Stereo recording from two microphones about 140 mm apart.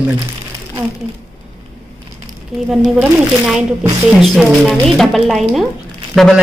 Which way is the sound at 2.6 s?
5° right (ahead or behind).